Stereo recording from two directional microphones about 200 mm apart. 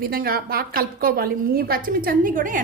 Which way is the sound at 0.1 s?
50° right (ahead or behind).